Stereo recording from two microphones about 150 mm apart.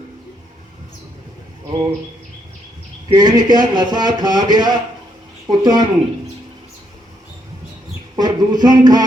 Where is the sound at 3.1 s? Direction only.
25° right (ahead or behind).